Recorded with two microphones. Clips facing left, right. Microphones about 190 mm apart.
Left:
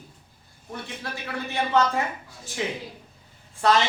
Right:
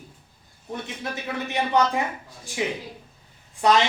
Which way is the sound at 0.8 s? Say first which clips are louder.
Right 2 dB; 20° right (ahead or behind).